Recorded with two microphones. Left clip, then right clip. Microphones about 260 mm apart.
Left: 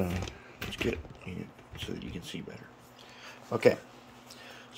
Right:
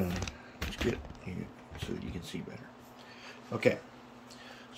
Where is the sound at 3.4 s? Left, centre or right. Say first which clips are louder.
Left 4 dB; centre.